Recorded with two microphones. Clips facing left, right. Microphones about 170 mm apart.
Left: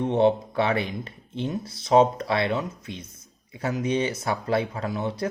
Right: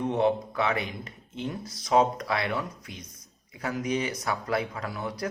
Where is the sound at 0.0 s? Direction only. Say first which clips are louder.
Left 4 dB; 25° left (ahead or behind).